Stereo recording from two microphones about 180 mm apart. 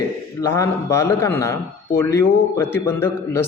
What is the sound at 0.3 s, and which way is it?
Speech, 15° left (ahead or behind).